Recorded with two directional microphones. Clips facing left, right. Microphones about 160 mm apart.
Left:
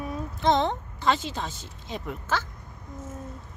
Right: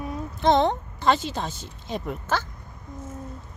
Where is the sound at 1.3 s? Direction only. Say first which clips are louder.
Right 3 dB; 45° right (ahead or behind).